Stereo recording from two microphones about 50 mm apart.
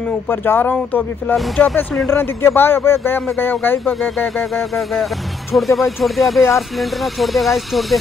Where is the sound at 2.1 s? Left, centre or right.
Left.